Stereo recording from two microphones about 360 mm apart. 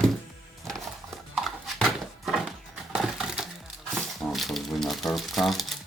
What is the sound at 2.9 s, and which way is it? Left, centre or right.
Crushing, centre.